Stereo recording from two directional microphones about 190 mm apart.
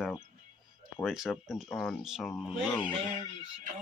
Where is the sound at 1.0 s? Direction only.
Centre (ahead or behind).